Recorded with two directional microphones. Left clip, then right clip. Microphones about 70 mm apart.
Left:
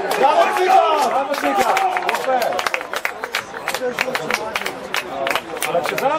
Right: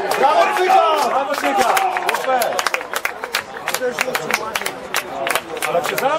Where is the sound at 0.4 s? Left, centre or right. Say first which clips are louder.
Even; centre.